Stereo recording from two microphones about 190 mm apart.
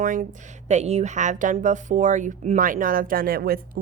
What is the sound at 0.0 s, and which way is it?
A woman's voice, 40° right (ahead or behind).